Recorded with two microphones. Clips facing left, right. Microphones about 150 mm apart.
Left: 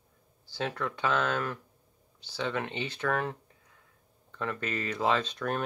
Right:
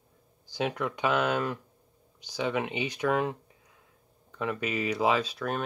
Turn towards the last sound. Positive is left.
turn(degrees=-5)  # may be behind; listen again after turning